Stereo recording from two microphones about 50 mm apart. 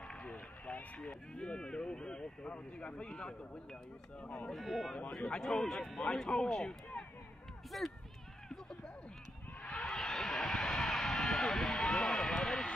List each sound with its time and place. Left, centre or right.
0.1 s run: centre
0.7 s speech: left
4.5 s speech: centre
5.1 s speech: centre
7.7 s speech: centre
9.7 s a sound: centre